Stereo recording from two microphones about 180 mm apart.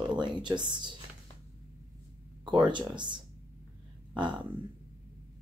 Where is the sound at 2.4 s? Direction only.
25° right (ahead or behind).